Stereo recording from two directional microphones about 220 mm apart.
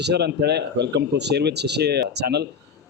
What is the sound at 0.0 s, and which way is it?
A man's voice, 50° right (ahead or behind).